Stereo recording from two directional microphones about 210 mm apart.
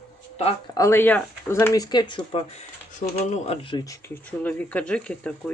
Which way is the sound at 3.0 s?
35° left (ahead or behind).